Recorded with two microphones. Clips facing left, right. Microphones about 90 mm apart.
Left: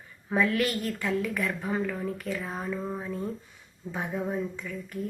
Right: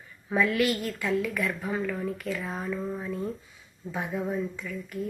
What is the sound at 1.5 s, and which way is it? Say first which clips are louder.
A woman's voice: even; 25° left (ahead or behind).